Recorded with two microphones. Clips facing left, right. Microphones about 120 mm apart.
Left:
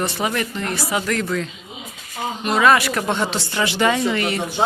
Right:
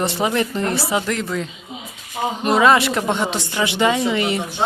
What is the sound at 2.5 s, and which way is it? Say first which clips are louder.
Speech: right 1 dB; 20° right (ahead or behind).